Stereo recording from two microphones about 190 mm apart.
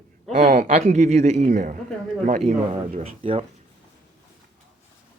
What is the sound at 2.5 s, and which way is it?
Speech, 30° right (ahead or behind).